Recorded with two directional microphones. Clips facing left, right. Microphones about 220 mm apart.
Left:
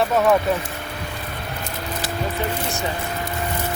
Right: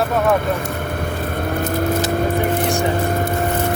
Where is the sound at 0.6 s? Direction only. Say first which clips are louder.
Right 8 dB; 50° right (ahead or behind).